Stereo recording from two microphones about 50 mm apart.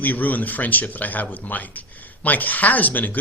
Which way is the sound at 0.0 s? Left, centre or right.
Left.